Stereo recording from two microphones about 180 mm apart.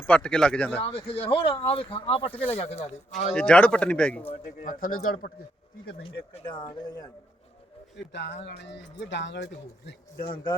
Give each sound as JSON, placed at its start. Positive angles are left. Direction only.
{"t": 0.0, "sound": "speech", "side_deg": 5}
{"t": 0.8, "sound": "speech", "side_deg": 30}
{"t": 3.3, "sound": "speech", "side_deg": 5}
{"t": 4.3, "sound": "speech", "side_deg": 45}
{"t": 6.0, "sound": "speech", "side_deg": 30}
{"t": 7.9, "sound": "a man's voice", "side_deg": 80}
{"t": 10.2, "sound": "speech", "side_deg": 25}